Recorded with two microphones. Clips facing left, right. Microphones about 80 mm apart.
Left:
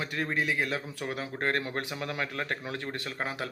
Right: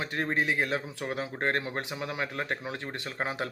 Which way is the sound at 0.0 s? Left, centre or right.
Right.